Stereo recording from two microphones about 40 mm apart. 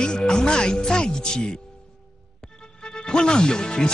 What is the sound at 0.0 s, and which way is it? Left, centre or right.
Speech, left.